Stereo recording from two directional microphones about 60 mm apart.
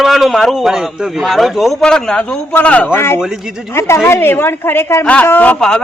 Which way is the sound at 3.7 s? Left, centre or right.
Left.